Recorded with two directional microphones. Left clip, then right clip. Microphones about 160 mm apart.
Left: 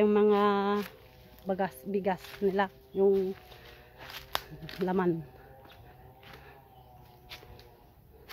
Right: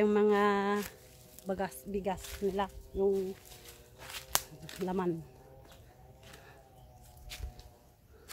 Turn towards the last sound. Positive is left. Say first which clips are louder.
# left 1 dB
turn(degrees=5)  # may be behind; listen again after turning